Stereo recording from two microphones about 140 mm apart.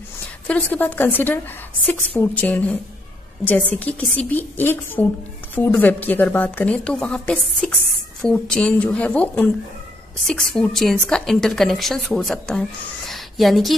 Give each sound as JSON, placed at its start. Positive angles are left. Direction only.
{"t": 0.5, "sound": "a woman's voice", "side_deg": 10}